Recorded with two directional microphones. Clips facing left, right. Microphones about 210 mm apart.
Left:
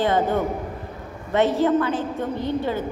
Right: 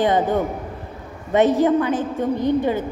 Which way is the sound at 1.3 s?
15° right (ahead or behind).